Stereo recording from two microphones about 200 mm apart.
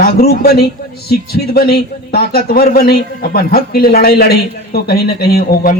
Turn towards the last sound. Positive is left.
turn(degrees=50)  # may be behind; listen again after turning